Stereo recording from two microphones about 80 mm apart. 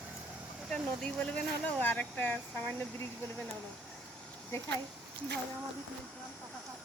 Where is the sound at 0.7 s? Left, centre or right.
Centre.